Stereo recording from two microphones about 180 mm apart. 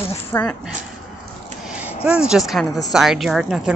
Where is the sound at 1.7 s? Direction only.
10° right (ahead or behind).